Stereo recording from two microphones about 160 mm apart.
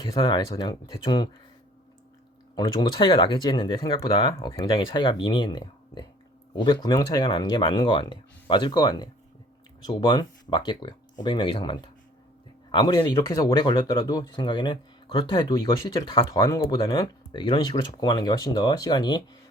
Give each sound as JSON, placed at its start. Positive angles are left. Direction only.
{"t": 0.0, "sound": "speech", "side_deg": 25}
{"t": 2.6, "sound": "speech", "side_deg": 25}